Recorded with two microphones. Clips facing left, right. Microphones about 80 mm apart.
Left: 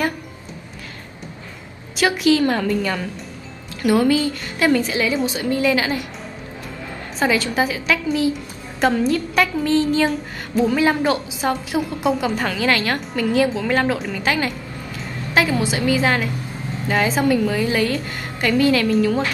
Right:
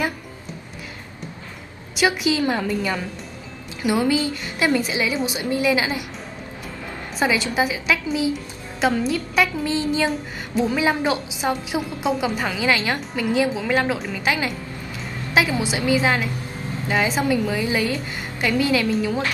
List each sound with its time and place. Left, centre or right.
2.0 s a woman's voice: centre
7.2 s a woman's voice: centre
15.3 s a sound: centre
15.8 s a woman's voice: centre